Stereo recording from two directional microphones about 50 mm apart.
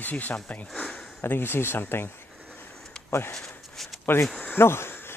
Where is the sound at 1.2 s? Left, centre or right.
Left.